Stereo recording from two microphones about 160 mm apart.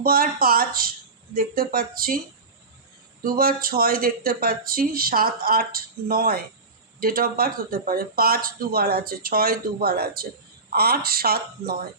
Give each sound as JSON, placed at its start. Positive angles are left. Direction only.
{"t": 0.0, "sound": "speech", "side_deg": -65}
{"t": 3.2, "sound": "speech", "side_deg": -65}